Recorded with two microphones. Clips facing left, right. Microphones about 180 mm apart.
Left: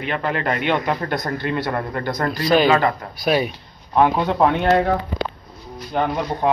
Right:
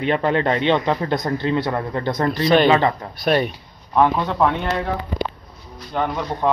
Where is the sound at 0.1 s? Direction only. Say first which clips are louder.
Right 3 dB; 30° right (ahead or behind).